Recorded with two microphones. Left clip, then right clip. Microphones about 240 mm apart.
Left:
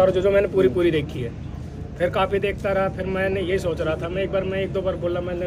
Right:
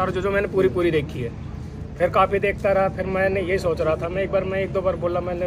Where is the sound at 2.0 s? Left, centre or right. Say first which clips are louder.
Right 3 dB; centre.